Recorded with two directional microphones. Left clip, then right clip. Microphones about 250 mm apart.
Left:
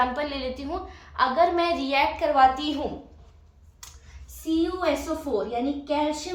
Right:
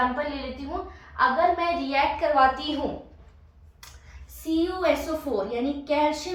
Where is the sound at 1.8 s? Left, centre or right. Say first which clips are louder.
Even; left.